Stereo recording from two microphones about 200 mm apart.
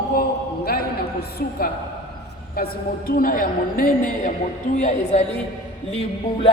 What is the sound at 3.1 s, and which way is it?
A man's voice, 45° left (ahead or behind).